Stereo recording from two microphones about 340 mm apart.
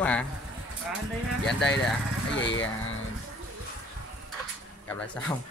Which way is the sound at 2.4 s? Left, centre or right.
Left.